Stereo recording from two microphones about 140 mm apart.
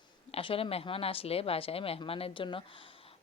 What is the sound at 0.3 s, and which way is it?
A woman's voice, 45° left (ahead or behind).